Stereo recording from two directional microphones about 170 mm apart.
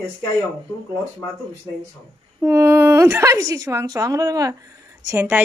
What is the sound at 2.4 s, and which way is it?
A woman's voice, 15° right (ahead or behind).